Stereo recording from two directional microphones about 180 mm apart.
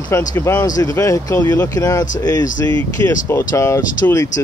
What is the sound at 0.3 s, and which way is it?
Speech, 15° left (ahead or behind).